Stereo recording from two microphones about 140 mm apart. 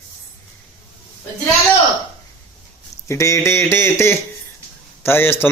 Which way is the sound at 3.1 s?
20° left (ahead or behind).